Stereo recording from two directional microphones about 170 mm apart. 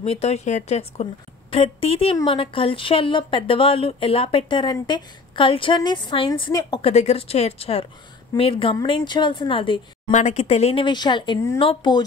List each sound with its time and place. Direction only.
0.0 s speech: 35° left (ahead or behind)
6.9 s speech: 40° left (ahead or behind)
10.1 s speech: 40° left (ahead or behind); by 12.0 s 25° left (ahead or behind)